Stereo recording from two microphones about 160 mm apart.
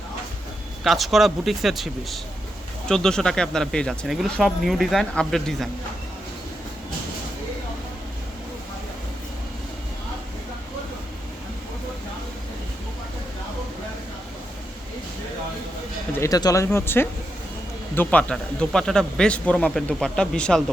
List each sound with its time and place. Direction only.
0.9 s speech: centre (ahead or behind)
16.1 s speech: 20° left (ahead or behind)